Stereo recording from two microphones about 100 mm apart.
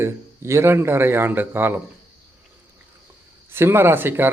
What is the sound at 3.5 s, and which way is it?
Speech, 25° right (ahead or behind).